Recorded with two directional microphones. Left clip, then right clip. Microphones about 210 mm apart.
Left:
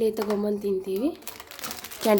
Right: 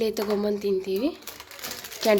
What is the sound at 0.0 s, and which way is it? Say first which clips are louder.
Speech: even; 5° left (ahead or behind).